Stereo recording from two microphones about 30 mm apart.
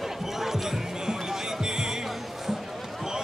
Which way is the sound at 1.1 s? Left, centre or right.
Right.